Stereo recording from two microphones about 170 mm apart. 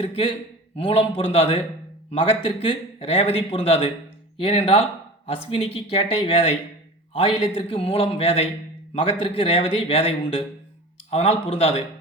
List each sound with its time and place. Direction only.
0.0 s speech: 30° left (ahead or behind)